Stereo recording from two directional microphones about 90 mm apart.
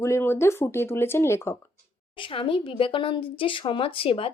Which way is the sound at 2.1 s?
70° left (ahead or behind).